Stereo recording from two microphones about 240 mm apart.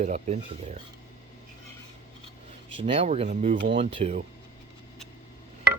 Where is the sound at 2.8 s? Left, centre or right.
Right.